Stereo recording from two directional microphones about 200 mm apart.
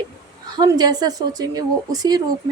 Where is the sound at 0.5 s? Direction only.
20° right (ahead or behind).